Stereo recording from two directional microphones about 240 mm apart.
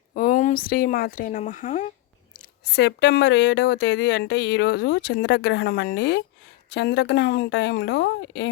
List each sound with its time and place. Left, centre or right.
0.1 s a woman's voice: left